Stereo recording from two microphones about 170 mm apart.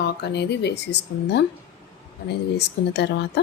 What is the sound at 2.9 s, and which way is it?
Speech, 90° left.